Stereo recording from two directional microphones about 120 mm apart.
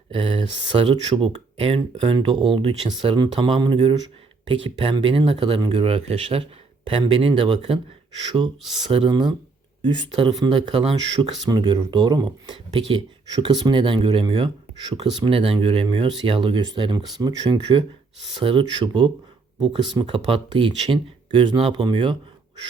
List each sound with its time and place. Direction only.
0.1 s speech: 45° right (ahead or behind)
8.9 s speech: 45° right (ahead or behind)